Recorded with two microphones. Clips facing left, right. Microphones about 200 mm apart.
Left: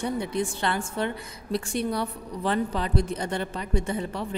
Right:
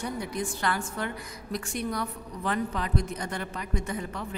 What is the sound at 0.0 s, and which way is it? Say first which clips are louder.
A woman's voice: left 5 dB; 25° left (ahead or behind).